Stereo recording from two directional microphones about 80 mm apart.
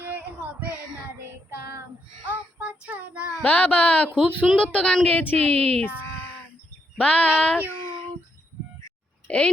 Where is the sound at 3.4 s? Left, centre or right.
Centre.